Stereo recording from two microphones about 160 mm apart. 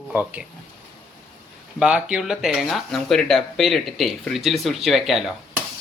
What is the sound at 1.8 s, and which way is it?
A man's voice, 5° right (ahead or behind).